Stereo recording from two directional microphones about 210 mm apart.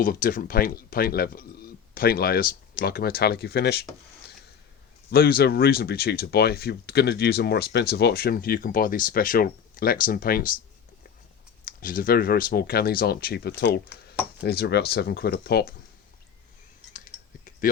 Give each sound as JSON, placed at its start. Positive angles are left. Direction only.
{"t": 0.0, "sound": "speech", "side_deg": 45}
{"t": 5.1, "sound": "speech", "side_deg": 45}
{"t": 11.6, "sound": "speech", "side_deg": 40}